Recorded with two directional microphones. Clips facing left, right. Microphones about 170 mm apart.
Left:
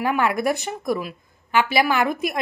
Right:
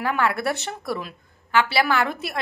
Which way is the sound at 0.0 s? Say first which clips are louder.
Left 2 dB; 15° left (ahead or behind).